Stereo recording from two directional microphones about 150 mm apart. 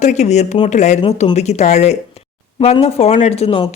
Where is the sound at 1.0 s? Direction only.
40° left (ahead or behind).